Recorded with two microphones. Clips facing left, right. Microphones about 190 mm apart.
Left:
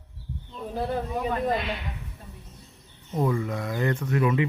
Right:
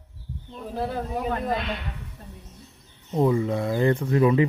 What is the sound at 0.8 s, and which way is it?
Speech, centre (ahead or behind).